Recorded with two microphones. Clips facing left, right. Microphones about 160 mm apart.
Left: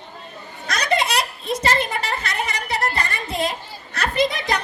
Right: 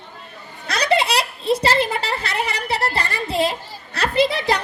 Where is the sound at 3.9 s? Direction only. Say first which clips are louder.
Right 2 dB; 30° right (ahead or behind).